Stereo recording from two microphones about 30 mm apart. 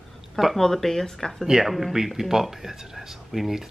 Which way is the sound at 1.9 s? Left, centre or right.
Centre.